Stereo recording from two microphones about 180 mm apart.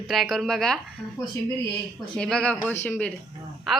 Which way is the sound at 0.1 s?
Centre (ahead or behind).